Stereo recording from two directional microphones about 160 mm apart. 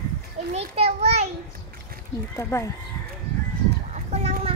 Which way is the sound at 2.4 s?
20° left (ahead or behind).